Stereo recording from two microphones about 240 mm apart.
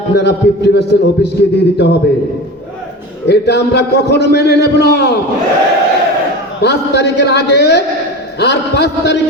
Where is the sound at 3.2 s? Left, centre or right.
Left.